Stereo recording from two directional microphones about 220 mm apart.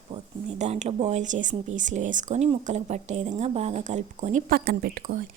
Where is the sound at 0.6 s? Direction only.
30° right (ahead or behind).